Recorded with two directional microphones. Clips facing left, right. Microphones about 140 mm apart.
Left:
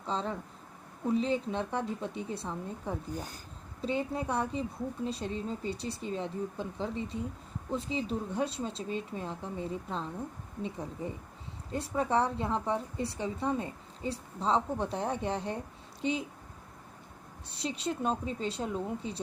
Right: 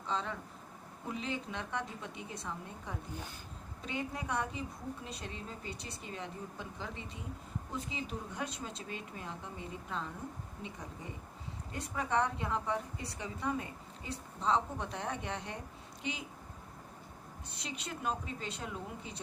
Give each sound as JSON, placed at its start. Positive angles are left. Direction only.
{"t": 0.0, "sound": "a woman's voice", "side_deg": 35}
{"t": 17.6, "sound": "a woman's voice", "side_deg": 30}